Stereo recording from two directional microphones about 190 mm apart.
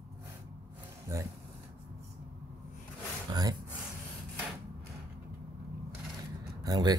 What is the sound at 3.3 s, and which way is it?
Speech, 20° right (ahead or behind).